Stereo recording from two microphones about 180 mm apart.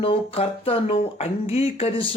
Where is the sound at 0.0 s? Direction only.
30° left (ahead or behind).